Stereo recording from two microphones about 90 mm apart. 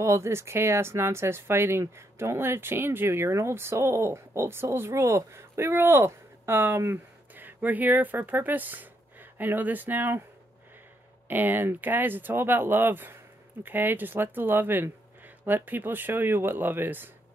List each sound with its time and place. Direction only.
0.0 s speech: 30° right (ahead or behind)
11.2 s speech: 20° right (ahead or behind)